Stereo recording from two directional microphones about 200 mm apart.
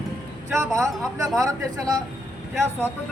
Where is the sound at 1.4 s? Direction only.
20° right (ahead or behind).